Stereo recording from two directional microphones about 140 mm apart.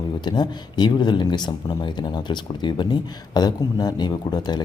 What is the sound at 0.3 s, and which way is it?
Speech, 35° left (ahead or behind).